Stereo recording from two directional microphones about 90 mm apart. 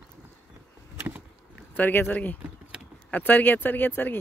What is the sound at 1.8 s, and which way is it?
Speech, 20° left (ahead or behind).